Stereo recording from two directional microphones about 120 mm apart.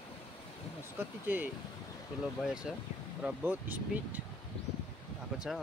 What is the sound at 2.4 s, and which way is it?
Speech, 5° right (ahead or behind).